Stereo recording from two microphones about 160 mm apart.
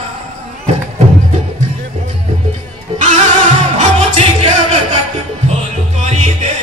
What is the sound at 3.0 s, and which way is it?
Music, 40° right (ahead or behind).